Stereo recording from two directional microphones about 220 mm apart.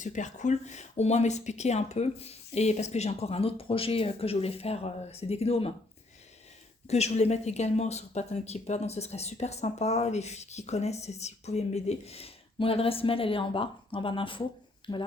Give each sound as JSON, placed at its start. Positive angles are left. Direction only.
{"t": 0.0, "sound": "speech", "side_deg": 35}
{"t": 6.8, "sound": "speech", "side_deg": 30}